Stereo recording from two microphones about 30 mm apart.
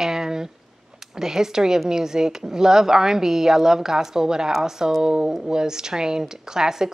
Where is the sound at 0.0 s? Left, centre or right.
Centre.